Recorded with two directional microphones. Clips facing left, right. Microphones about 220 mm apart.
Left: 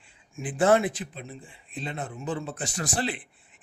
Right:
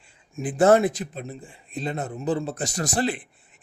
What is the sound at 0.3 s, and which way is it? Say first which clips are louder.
Speech: right 4 dB; 40° right (ahead or behind).